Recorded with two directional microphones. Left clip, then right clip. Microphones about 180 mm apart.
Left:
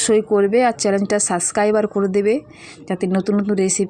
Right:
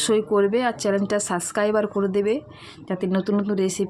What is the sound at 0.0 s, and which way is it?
Speech, 15° left (ahead or behind).